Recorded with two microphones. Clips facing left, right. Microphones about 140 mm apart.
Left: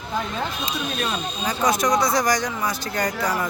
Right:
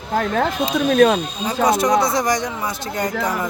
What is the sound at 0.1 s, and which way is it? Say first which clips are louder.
Speech: right 8 dB; 65° right (ahead or behind).